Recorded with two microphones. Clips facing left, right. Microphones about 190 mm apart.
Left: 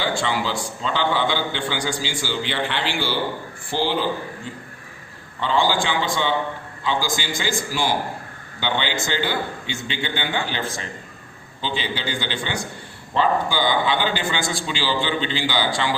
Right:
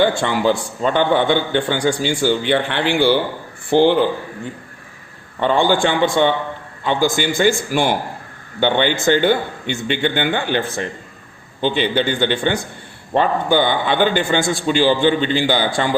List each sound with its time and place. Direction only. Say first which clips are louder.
0.0 s a man's voice: right 8 dB; 55° right (ahead or behind)
5.4 s a man's voice: right 5 dB; 55° right (ahead or behind)